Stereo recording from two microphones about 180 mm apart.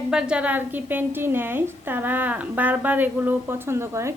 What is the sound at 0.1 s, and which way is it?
A woman's voice, 5° right (ahead or behind).